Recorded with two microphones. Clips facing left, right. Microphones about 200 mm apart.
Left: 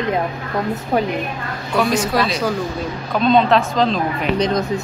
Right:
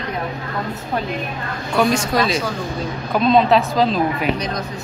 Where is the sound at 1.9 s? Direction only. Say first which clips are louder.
Left 1 dB; centre (ahead or behind).